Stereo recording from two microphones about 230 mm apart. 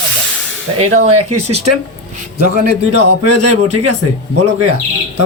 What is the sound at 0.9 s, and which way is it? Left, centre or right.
Speech, right.